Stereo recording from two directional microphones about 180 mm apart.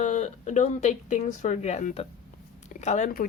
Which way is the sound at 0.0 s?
40° left (ahead or behind).